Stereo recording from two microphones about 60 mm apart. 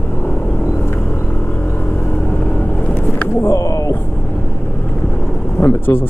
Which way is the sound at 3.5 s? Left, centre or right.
Left.